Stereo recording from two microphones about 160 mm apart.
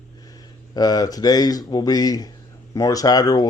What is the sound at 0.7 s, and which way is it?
Speech, 25° left (ahead or behind).